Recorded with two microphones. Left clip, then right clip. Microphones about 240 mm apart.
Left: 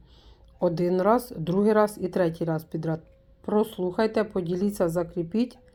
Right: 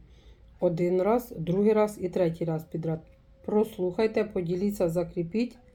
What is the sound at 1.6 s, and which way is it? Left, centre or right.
Speech, left.